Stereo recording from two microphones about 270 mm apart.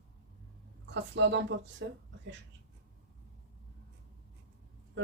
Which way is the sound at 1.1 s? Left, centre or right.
Right.